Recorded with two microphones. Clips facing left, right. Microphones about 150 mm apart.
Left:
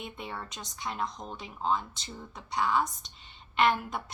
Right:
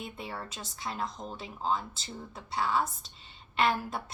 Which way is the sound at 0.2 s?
30° right (ahead or behind).